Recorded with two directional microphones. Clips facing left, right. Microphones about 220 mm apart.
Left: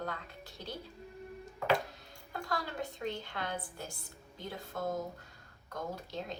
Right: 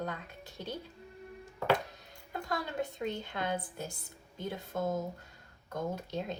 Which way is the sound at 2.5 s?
20° right (ahead or behind).